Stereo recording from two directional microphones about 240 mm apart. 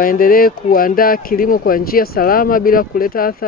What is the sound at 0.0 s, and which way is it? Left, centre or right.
Speech, left.